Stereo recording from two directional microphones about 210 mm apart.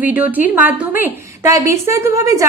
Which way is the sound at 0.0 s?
10° right (ahead or behind).